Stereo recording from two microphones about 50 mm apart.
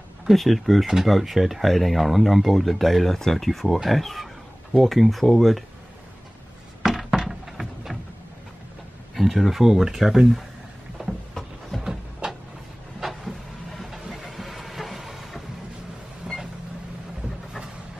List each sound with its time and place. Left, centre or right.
0.3 s speech: centre
6.8 s a sound: centre
9.1 s speech: centre
11.0 s a sound: centre
11.8 s vehicle: centre
13.0 s vehicle: centre
16.3 s vehicle: centre